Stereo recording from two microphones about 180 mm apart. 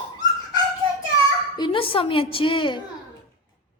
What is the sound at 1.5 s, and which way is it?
A woman's voice, 25° left (ahead or behind).